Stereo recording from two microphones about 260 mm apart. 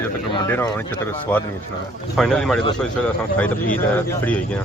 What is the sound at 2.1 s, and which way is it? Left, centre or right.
Speech, centre.